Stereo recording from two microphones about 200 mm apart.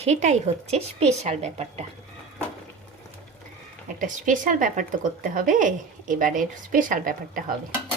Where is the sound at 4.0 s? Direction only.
40° right (ahead or behind).